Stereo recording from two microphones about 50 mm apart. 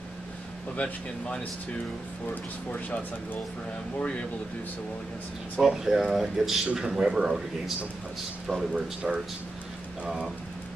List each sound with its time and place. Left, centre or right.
0.7 s speech: left
5.6 s a man's voice: centre
8.7 s a man's voice: centre
10.0 s speech: centre